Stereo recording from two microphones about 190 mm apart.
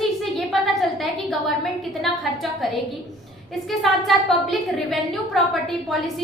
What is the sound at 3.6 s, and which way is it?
A woman's voice, centre (ahead or behind).